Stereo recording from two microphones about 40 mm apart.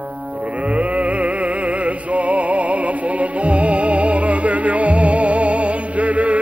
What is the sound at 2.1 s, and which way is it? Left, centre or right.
Music, right.